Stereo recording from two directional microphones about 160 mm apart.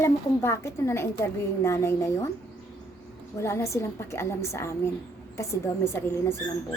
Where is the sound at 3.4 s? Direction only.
15° left (ahead or behind).